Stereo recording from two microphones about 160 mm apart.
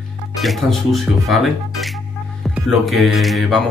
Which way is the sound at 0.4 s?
Centre (ahead or behind).